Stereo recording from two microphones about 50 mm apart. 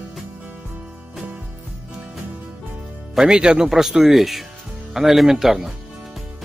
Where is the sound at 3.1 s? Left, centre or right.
Centre.